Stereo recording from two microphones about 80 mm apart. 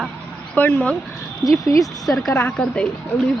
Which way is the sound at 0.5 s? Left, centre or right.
Left.